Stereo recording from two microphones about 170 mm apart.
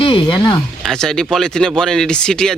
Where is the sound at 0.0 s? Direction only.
30° left (ahead or behind).